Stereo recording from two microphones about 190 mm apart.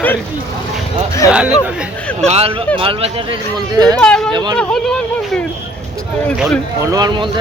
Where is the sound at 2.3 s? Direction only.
30° right (ahead or behind).